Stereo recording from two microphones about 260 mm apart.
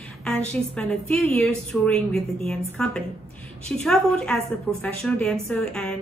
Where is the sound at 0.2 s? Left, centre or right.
Centre.